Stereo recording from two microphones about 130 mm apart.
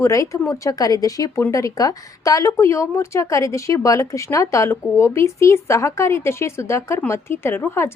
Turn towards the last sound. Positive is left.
turn(degrees=20)  # may be behind; listen again after turning